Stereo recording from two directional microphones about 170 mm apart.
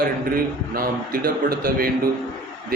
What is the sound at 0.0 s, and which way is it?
A man's voice, 60° right (ahead or behind).